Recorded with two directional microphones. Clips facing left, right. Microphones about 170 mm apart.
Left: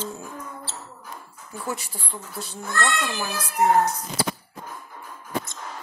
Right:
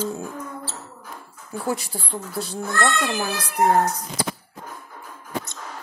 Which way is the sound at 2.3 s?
35° right (ahead or behind).